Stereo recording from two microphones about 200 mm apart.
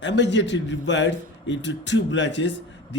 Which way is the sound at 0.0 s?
60° left (ahead or behind).